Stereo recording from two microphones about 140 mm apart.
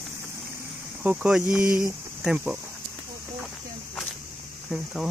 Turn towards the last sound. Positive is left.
turn(degrees=-5)  # may be behind; listen again after turning